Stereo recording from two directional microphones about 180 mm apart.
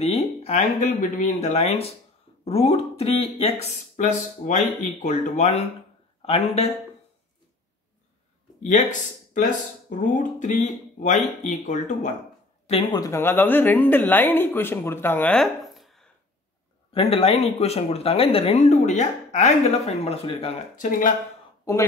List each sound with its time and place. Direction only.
0.0 s speech: 35° left (ahead or behind)
9.3 s speech: 45° left (ahead or behind)
12.6 s a woman's voice: 25° left (ahead or behind); by 16.1 s centre (ahead or behind)
16.9 s speech: 30° left (ahead or behind)
20.7 s speech: 45° left (ahead or behind)